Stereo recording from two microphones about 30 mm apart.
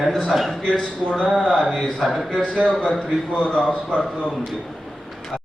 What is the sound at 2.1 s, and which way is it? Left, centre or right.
Speech, centre.